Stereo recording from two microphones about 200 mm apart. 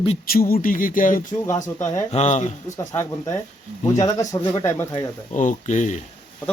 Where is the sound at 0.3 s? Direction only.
45° left (ahead or behind).